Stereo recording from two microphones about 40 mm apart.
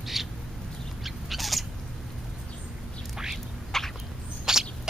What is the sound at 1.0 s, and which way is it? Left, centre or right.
Owl, centre.